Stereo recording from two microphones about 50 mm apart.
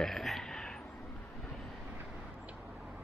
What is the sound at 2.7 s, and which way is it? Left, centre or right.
Tick-tock, centre.